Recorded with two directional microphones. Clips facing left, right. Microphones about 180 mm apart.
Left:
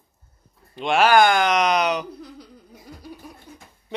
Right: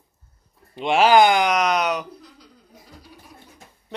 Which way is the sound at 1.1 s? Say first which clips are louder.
Right 1 dB; 20° right (ahead or behind).